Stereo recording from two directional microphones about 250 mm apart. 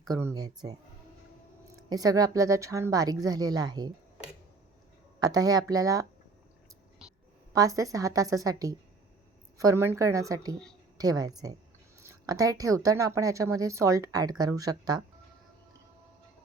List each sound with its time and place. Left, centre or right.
0.0 s a woman's voice: centre
1.9 s a woman's voice: centre
5.2 s a woman's voice: centre
7.5 s a woman's voice: centre